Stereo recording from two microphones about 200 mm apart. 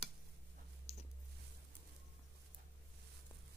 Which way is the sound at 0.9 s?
30° left (ahead or behind).